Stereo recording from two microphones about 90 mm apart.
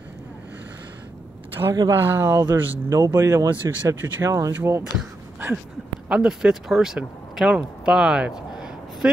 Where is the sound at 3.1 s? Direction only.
40° right (ahead or behind).